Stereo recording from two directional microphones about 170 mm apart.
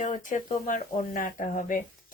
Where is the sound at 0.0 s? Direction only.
50° left (ahead or behind).